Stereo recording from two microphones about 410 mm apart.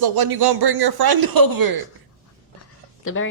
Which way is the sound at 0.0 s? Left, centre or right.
Right.